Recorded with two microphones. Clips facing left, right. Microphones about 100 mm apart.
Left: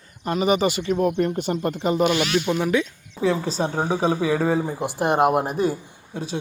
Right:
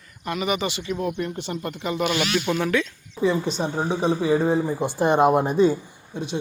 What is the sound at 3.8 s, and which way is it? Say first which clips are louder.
Speech: left 1 dB; 55° left (ahead or behind).